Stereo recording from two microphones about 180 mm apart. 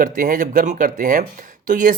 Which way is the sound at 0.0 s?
50° right (ahead or behind).